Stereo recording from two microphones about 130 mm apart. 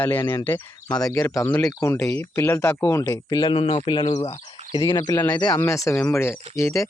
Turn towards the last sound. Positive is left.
turn(degrees=20)  # may be behind; listen again after turning